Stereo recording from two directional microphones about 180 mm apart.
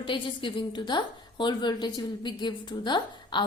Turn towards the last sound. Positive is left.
turn(degrees=25)  # may be behind; listen again after turning